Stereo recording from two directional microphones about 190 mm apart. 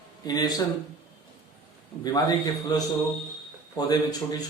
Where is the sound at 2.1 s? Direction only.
20° left (ahead or behind).